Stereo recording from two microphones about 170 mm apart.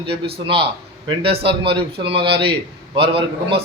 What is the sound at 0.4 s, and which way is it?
A man's voice, 30° right (ahead or behind).